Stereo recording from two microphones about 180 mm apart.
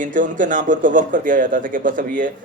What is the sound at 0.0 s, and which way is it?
Speech, 45° right (ahead or behind).